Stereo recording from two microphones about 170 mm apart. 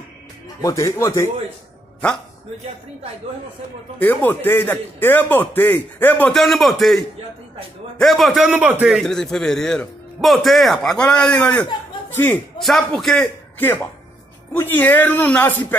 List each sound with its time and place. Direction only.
0.6 s a man's voice: 20° left (ahead or behind)
4.0 s a man's voice: 10° left (ahead or behind)
8.0 s a man's voice: centre (ahead or behind)
12.5 s a man's voice: centre (ahead or behind)